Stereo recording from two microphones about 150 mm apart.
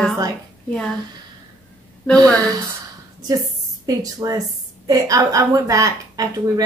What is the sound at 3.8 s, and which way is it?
A woman's voice, 25° right (ahead or behind).